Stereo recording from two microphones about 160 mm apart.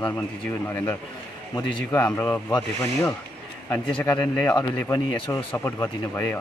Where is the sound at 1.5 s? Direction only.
15° left (ahead or behind).